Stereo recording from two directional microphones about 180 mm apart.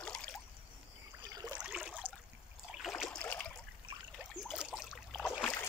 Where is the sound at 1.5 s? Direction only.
5° right (ahead or behind).